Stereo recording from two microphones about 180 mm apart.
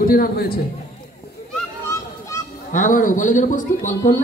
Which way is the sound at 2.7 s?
45° left (ahead or behind).